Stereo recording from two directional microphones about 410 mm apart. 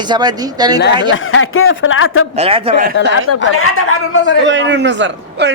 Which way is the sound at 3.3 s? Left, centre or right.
Left.